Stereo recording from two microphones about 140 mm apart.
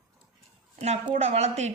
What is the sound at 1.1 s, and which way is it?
Speech, 50° right (ahead or behind).